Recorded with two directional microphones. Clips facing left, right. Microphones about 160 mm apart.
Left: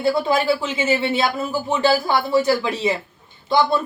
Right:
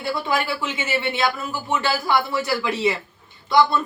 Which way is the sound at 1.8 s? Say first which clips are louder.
Left 4 dB; 30° left (ahead or behind).